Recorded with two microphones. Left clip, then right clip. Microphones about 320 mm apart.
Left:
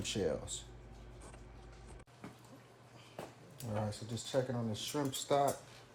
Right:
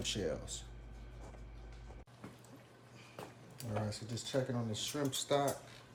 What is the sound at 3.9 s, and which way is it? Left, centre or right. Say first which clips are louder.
Speech: even; centre.